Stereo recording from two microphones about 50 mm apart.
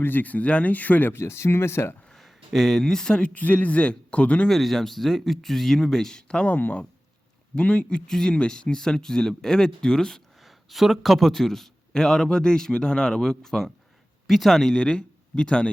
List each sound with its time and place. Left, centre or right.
0.0 s speech: left
1.1 s speech: left
2.1 s speech: centre
3.3 s speech: left
4.4 s speech: centre
6.5 s speech: left
7.5 s speech: left
10.4 s speech: centre
14.8 s speech: left